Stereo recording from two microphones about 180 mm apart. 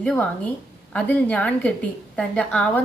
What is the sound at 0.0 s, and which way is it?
A woman's voice, 5° left (ahead or behind).